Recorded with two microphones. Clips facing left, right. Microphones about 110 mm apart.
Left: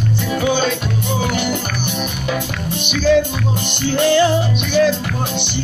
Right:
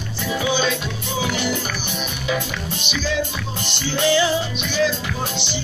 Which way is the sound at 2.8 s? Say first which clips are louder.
Left 11 dB; 55° left (ahead or behind).